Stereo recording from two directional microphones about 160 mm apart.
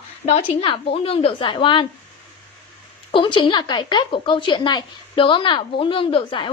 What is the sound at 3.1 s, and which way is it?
A woman's voice, 30° left (ahead or behind).